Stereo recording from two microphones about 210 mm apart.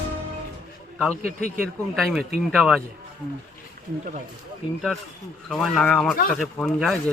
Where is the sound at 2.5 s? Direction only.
Centre (ahead or behind).